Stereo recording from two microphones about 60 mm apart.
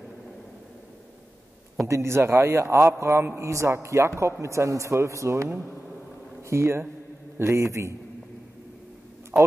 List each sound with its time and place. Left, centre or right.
1.9 s a man's voice: right
9.3 s speech: right